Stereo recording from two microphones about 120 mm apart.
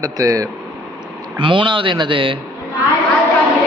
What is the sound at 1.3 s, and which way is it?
A man's voice, 45° right (ahead or behind).